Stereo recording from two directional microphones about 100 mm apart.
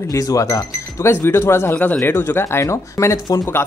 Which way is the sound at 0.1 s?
35° left (ahead or behind).